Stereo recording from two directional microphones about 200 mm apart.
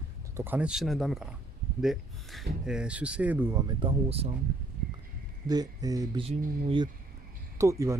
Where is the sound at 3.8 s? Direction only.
30° right (ahead or behind).